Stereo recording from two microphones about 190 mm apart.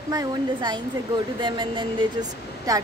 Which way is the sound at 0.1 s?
20° right (ahead or behind).